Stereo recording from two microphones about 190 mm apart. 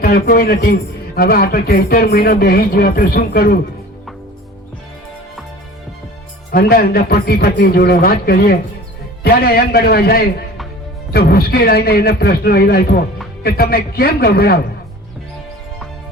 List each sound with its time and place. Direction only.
0.0 s speech: 50° left (ahead or behind)
6.5 s a man's voice: 50° left (ahead or behind)